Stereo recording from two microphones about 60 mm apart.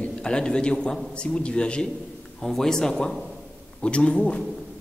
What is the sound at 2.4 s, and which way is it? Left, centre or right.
A man's voice, centre.